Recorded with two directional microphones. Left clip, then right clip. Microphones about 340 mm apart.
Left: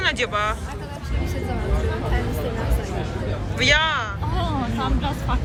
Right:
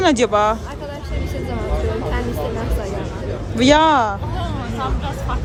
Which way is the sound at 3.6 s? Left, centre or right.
Centre.